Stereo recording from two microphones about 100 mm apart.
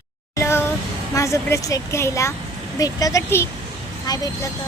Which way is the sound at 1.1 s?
30° left (ahead or behind).